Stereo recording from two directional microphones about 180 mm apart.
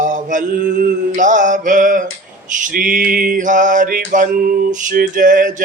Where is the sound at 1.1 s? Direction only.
45° right (ahead or behind).